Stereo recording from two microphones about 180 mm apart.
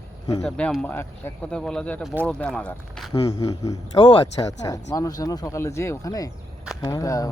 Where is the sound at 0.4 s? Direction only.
5° left (ahead or behind).